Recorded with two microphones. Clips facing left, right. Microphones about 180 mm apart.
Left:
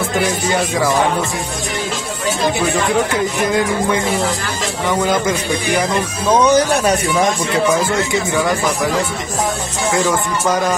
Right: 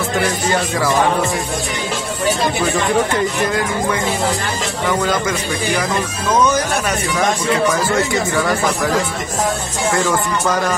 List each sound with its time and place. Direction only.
6.4 s speech: 35° left (ahead or behind)